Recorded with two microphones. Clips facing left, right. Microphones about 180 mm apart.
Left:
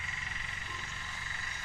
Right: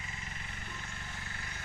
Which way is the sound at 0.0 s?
45° right (ahead or behind).